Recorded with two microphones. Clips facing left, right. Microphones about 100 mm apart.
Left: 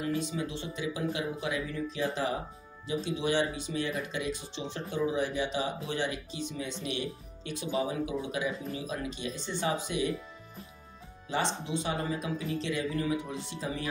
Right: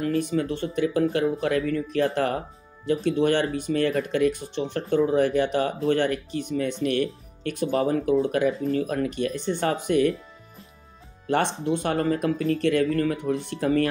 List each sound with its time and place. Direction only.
0.0 s speech: 55° right (ahead or behind)
11.2 s speech: 60° right (ahead or behind)